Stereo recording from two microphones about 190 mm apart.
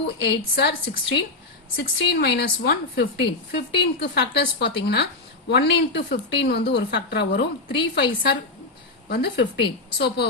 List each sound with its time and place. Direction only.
0.0 s a woman's voice: 65° left (ahead or behind)